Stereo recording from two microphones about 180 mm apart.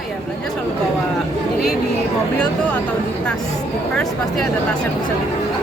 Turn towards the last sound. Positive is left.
turn(degrees=5)  # may be behind; listen again after turning